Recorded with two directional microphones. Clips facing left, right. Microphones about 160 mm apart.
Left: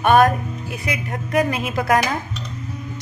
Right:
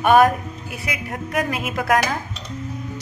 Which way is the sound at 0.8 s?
Centre (ahead or behind).